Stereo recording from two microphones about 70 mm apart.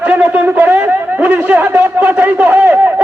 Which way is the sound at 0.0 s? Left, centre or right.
Right.